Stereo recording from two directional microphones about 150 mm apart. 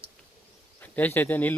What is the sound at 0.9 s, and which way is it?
Speech, 10° left (ahead or behind).